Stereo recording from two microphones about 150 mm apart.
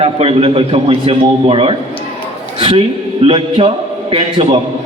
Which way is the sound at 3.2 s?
40° right (ahead or behind).